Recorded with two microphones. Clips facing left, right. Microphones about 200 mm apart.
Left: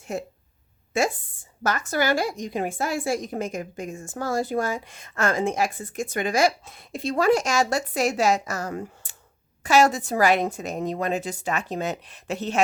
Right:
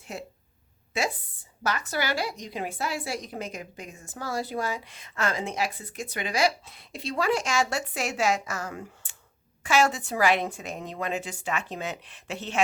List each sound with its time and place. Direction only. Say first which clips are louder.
0.0 s a woman's voice: left 7 dB; 45° left (ahead or behind)